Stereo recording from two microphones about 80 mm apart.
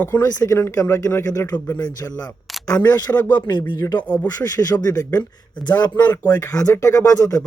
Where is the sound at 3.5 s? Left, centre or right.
Left.